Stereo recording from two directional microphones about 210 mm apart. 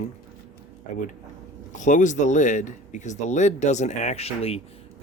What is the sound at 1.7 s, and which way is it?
Speech, 35° left (ahead or behind).